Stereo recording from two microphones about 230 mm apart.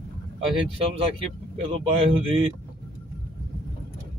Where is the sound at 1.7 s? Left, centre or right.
Right.